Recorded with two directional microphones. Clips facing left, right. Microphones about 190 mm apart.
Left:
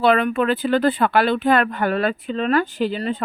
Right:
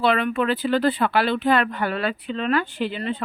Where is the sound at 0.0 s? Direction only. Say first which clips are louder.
Left 3 dB; 45° left (ahead or behind).